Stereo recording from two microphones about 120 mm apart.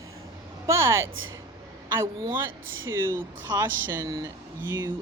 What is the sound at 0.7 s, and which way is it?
Speech, 20° right (ahead or behind).